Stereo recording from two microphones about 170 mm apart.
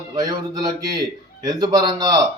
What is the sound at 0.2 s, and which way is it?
A man's voice, 20° right (ahead or behind).